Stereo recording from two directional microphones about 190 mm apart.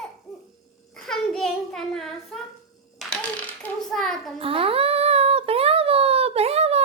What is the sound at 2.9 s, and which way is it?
Clapping, 5° left (ahead or behind).